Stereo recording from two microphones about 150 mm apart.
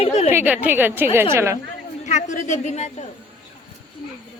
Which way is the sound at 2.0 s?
55° left (ahead or behind).